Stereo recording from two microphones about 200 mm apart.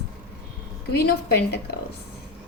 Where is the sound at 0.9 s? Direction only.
55° left (ahead or behind).